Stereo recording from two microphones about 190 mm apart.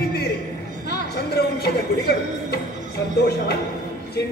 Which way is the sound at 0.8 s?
60° left (ahead or behind).